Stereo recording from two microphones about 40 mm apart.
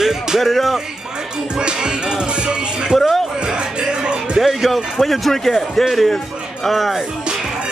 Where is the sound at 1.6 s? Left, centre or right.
Right.